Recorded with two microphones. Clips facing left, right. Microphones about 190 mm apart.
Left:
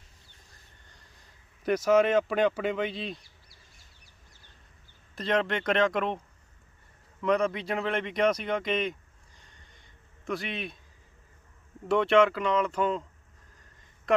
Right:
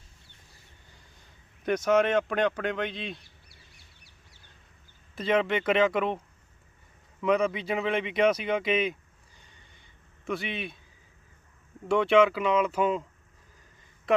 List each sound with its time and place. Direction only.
0.9 s speech: centre (ahead or behind)
3.5 s duck: 70° right (ahead or behind)
5.1 s speech: 5° right (ahead or behind)
10.2 s speech: centre (ahead or behind)
11.9 s speech: centre (ahead or behind)